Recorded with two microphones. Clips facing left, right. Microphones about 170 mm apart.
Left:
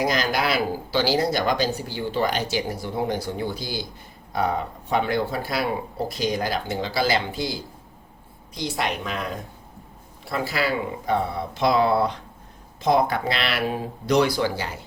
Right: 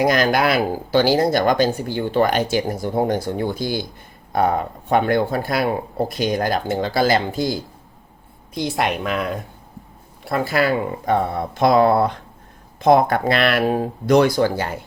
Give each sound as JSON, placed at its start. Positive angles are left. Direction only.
{"t": 0.0, "sound": "a woman's voice", "side_deg": -55}
{"t": 10.2, "sound": "speech", "side_deg": -55}